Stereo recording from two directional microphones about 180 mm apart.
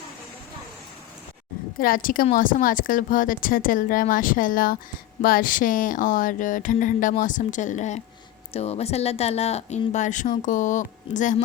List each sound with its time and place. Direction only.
1.8 s a woman's voice: 50° left (ahead or behind)